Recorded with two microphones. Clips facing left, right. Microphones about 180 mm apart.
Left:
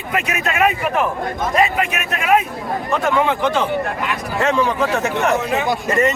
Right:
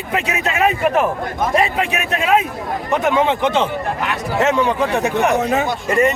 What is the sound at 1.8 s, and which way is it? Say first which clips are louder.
Speech: right 2 dB; 25° right (ahead or behind).